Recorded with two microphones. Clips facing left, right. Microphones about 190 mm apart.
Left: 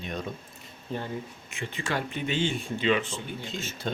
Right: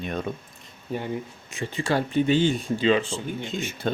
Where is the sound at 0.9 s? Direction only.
10° right (ahead or behind).